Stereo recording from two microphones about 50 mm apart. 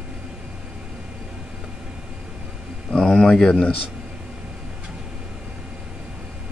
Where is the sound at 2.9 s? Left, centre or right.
Centre.